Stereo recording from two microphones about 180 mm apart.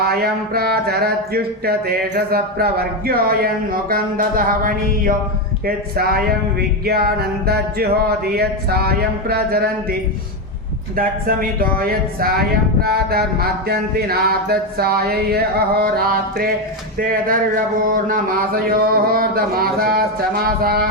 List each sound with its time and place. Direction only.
0.0 s speech: 60° right (ahead or behind)
10.9 s speech: 50° right (ahead or behind)